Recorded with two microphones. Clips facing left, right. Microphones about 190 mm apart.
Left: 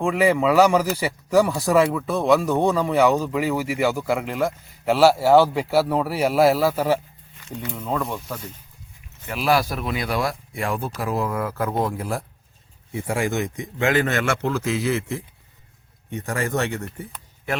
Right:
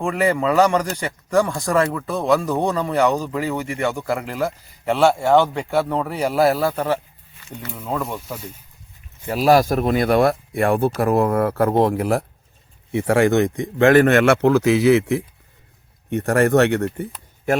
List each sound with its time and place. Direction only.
0.0 s speech: centre (ahead or behind)
7.7 s speech: 5° right (ahead or behind)
9.2 s speech: 40° right (ahead or behind); by 17.1 s 70° right (ahead or behind)
17.5 s speech: 45° right (ahead or behind)